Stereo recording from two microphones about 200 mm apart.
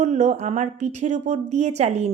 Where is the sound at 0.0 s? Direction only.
35° right (ahead or behind).